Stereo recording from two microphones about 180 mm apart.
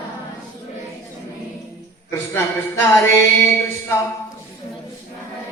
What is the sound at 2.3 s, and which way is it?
Mantra, 10° left (ahead or behind).